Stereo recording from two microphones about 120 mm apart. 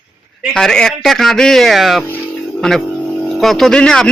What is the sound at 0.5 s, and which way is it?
A man's voice, 5° left (ahead or behind).